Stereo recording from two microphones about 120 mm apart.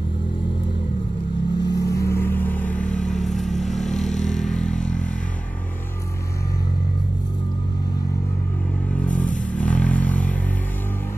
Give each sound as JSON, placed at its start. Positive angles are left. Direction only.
{"t": 1.6, "sound": "vehicle", "side_deg": 30}
{"t": 3.1, "sound": "vehicle", "side_deg": 0}
{"t": 9.6, "sound": "vehicle", "side_deg": 10}